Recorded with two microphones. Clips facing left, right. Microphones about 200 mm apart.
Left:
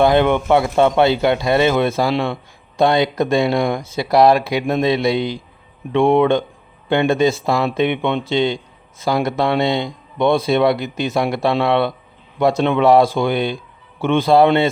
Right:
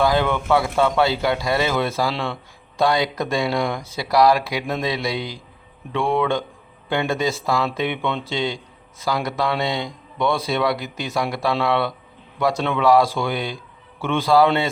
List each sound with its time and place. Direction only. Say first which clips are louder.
0.0 s speech: left 5 dB; 20° left (ahead or behind)